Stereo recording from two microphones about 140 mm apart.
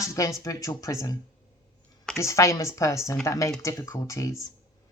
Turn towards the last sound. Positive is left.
turn(degrees=25)  # may be behind; listen again after turning